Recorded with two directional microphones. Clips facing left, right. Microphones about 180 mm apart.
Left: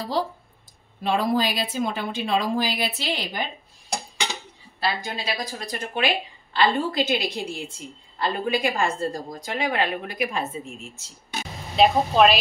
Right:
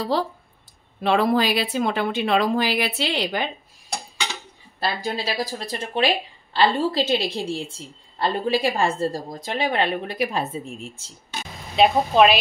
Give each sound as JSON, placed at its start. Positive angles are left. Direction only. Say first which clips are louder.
{"t": 1.0, "sound": "a woman's voice", "louder": "right 3 dB", "side_deg": -70}
{"t": 4.7, "sound": "a woman's voice", "louder": "right 2 dB", "side_deg": -35}
{"t": 11.7, "sound": "speech", "louder": "right 1 dB", "side_deg": 0}